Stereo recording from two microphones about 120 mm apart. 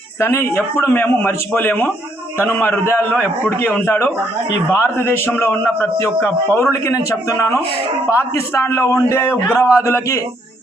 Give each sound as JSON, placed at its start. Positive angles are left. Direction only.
{"t": 0.2, "sound": "a man's voice", "side_deg": 20}